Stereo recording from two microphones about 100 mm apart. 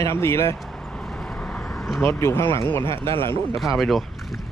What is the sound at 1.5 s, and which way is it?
Vehicle, 15° left (ahead or behind).